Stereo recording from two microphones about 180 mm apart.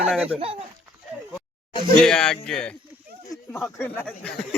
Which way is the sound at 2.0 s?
5° left (ahead or behind).